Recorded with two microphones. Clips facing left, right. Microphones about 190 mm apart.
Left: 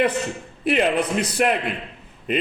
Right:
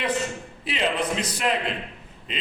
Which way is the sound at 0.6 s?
55° left (ahead or behind).